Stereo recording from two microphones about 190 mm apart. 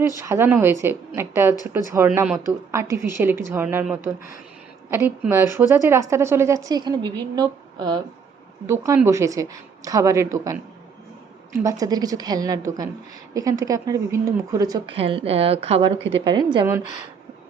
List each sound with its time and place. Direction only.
0.2 s a woman's voice: 10° right (ahead or behind)
14.9 s a woman's voice: 30° right (ahead or behind)